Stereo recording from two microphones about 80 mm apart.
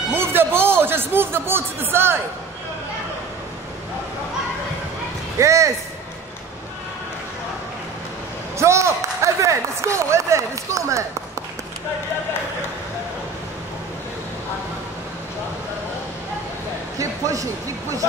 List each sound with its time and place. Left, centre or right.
0.1 s a man's voice: right
5.4 s speech: right
8.5 s speech: right
17.0 s a man's voice: right